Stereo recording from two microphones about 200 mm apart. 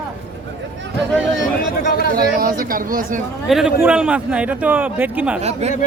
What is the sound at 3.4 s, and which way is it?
Speech, centre (ahead or behind).